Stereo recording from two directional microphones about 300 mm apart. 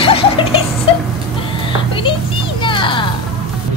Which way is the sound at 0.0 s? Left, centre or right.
Centre.